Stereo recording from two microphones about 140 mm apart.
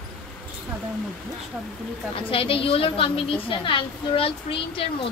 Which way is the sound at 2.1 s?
40° left (ahead or behind).